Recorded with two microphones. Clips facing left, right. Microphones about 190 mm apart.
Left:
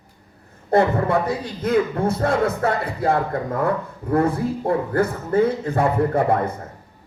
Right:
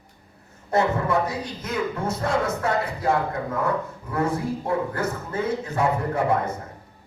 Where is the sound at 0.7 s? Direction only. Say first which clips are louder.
Left 4 dB; 55° left (ahead or behind).